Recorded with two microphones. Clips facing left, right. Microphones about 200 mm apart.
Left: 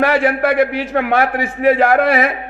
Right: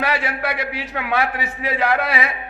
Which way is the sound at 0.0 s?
50° left (ahead or behind).